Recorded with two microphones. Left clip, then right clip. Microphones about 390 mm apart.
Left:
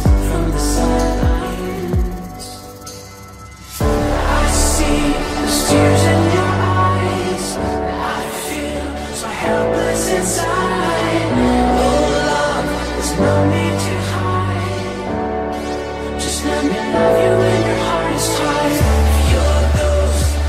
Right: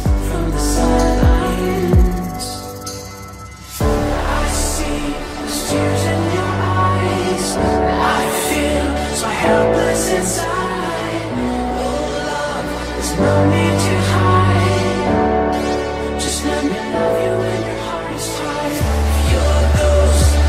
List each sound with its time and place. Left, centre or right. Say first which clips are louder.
0.7 s music: right 2 dB; centre
4.8 s music: left 5 dB; left
7.6 s music: right 6 dB; right
9.4 s music: right 2 dB; right; by 10.2 s centre
11.3 s music: left 7 dB; left
13.2 s music: right 1 dB; centre
13.5 s music: right 2 dB; centre
14.1 s music: right 7 dB; right
16.9 s music: left 4 dB; left
19.8 s music: right 4 dB; centre